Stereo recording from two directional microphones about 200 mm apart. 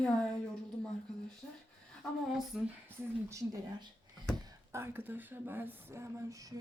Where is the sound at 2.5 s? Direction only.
Centre (ahead or behind).